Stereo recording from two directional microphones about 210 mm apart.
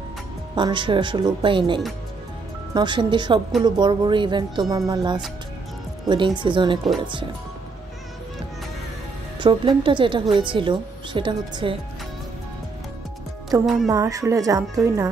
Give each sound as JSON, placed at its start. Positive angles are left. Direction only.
{"t": 0.6, "sound": "a woman's voice", "side_deg": -25}
{"t": 9.4, "sound": "a woman's voice", "side_deg": -20}
{"t": 13.5, "sound": "speech", "side_deg": -15}